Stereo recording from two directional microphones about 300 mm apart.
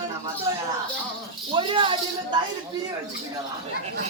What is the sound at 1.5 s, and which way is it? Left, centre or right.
Speech, centre.